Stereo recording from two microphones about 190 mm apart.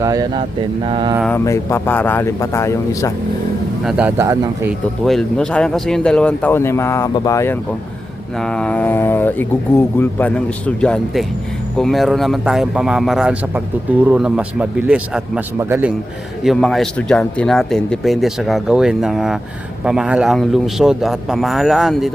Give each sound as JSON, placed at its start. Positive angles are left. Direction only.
{"t": 0.0, "sound": "speech", "side_deg": -20}
{"t": 1.5, "sound": "speech", "side_deg": 15}
{"t": 3.8, "sound": "speech", "side_deg": -5}
{"t": 5.0, "sound": "speech", "side_deg": 0}
{"t": 8.4, "sound": "speech", "side_deg": 5}
{"t": 16.4, "sound": "speech", "side_deg": 0}